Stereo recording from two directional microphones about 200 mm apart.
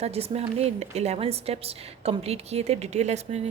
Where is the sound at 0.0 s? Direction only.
30° right (ahead or behind).